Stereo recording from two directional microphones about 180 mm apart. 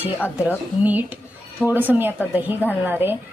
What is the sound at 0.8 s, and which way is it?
Speech, 10° right (ahead or behind).